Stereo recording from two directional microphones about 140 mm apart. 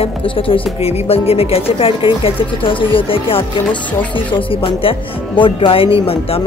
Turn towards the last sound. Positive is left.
turn(degrees=40)  # may be behind; listen again after turning